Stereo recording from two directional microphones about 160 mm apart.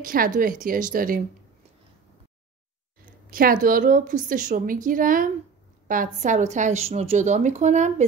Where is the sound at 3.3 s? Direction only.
60° right (ahead or behind).